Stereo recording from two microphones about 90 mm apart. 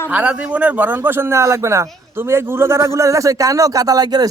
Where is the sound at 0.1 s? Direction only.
15° right (ahead or behind).